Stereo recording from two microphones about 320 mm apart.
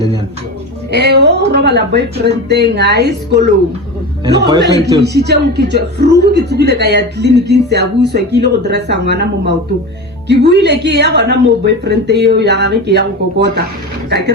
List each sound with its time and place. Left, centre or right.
0.9 s a man's voice: right
4.6 s a man's voice: right